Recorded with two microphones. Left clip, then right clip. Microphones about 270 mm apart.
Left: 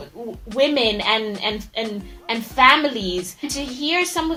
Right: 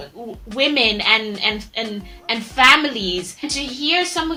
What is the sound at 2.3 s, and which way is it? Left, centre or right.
Speech, left.